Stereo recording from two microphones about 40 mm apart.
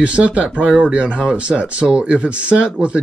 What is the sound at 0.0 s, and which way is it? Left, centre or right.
Speech, right.